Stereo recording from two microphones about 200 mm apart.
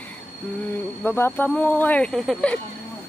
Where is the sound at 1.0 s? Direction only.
10° left (ahead or behind).